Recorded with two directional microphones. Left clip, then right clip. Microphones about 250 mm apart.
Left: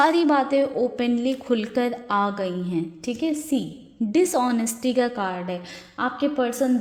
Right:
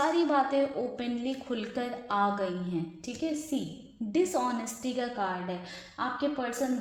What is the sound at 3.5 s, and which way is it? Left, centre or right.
A woman's voice, left.